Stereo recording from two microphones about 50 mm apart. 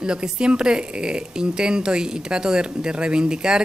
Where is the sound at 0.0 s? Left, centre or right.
Centre.